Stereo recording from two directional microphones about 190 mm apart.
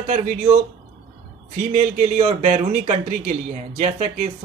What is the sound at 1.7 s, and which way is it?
Speech, 40° right (ahead or behind).